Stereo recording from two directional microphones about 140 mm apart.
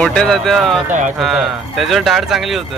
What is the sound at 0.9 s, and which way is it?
Speech, 65° right (ahead or behind).